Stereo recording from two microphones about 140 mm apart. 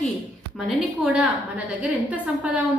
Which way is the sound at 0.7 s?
10° right (ahead or behind).